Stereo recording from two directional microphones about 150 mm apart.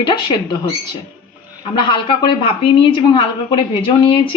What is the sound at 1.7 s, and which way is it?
A man's voice, 35° left (ahead or behind).